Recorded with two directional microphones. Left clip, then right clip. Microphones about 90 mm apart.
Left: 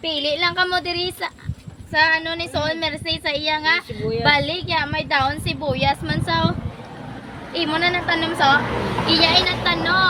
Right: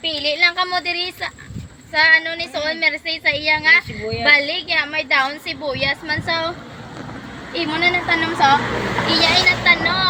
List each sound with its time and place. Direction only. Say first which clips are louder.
0.0 s a woman's voice: right 3 dB; 60° left (ahead or behind)
7.5 s a woman's voice: right 2 dB; 45° left (ahead or behind)
8.6 s a child's voice: right 2 dB; 5° right (ahead or behind)
9.2 s a woman's voice: right 5 dB; 60° left (ahead or behind)